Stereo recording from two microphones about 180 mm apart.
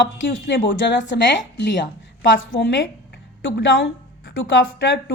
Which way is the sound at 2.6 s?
90° left.